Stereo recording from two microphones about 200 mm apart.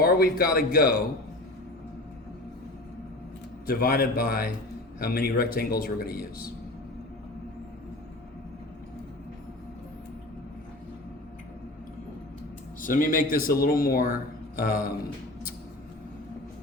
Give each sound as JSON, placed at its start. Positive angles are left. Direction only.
{"t": 0.0, "sound": "speech", "side_deg": 50}
{"t": 3.7, "sound": "speech", "side_deg": 45}
{"t": 12.8, "sound": "speech", "side_deg": 45}